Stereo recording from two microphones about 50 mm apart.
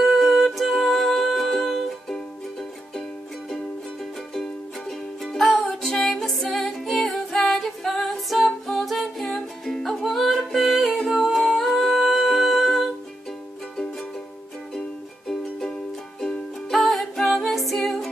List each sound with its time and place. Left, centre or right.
0.0 s music: centre
4.3 s music: centre
6.1 s music: centre
11.1 s humming: centre
16.7 s music: centre